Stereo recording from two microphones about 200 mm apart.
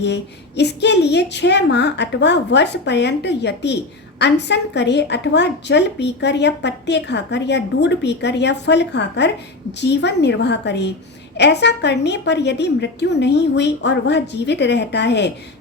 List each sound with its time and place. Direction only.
0.0 s a woman's voice: 60° left (ahead or behind)